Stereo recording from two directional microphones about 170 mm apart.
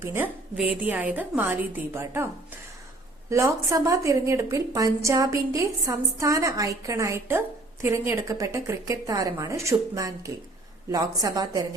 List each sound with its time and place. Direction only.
0.0 s a woman's voice: 15° right (ahead or behind)